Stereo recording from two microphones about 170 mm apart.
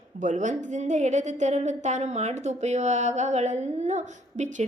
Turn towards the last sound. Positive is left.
turn(degrees=-45)  # may be behind; listen again after turning